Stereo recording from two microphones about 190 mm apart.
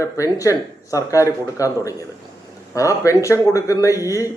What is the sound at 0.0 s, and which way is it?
A man's voice, 15° left (ahead or behind).